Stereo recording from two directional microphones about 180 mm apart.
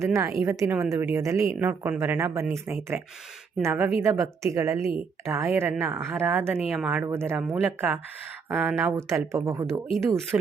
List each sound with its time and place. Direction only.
0.0 s a woman's voice: 15° right (ahead or behind)